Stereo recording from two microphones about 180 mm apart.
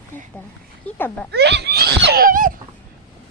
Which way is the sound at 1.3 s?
70° right (ahead or behind).